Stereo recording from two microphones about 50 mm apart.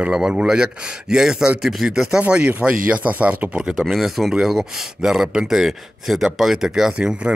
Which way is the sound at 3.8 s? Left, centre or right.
Centre.